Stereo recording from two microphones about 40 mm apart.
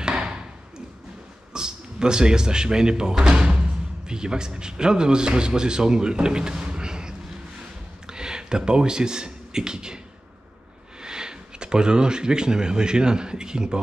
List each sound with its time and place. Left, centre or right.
0.0 s a sound: right
1.5 s a man's voice: centre
11.0 s speech: centre